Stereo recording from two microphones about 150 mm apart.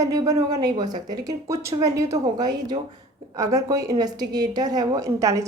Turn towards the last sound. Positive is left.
turn(degrees=-20)  # may be behind; listen again after turning